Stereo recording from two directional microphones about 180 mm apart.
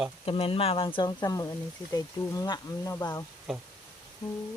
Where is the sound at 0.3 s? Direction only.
30° left (ahead or behind).